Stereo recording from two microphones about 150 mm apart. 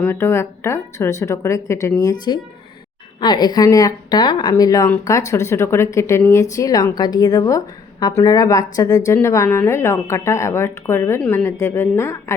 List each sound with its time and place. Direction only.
0.0 s speech: 15° left (ahead or behind)
3.2 s speech: 30° left (ahead or behind)